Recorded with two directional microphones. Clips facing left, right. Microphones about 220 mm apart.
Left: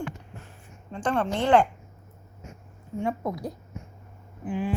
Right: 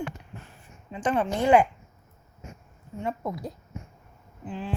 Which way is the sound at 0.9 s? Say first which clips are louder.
Even; 5° right (ahead or behind).